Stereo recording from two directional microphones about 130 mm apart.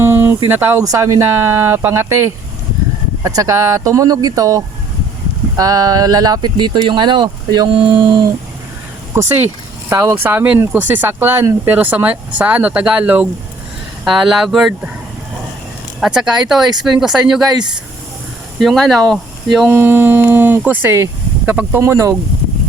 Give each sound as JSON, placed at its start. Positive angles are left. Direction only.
{"t": 0.0, "sound": "a sound", "side_deg": -20}
{"t": 0.4, "sound": "speech", "side_deg": -15}
{"t": 9.1, "sound": "speech", "side_deg": -15}
{"t": 16.0, "sound": "speech", "side_deg": -5}
{"t": 18.6, "sound": "speech", "side_deg": 0}
{"t": 19.6, "sound": "speech", "side_deg": -15}